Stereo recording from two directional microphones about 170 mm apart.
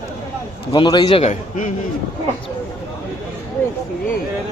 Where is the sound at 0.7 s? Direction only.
25° left (ahead or behind).